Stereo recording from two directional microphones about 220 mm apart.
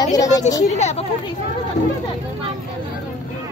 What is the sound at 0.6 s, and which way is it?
Speech, 30° left (ahead or behind).